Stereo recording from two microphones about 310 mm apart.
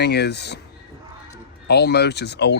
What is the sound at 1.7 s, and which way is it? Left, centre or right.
Speech, left.